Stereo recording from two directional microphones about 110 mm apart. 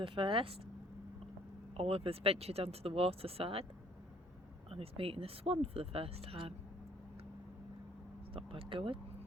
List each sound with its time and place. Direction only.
0.0 s speech: 50° right (ahead or behind)
1.7 s speech: 60° right (ahead or behind)
4.7 s speech: 60° right (ahead or behind)
8.3 s speech: 55° right (ahead or behind)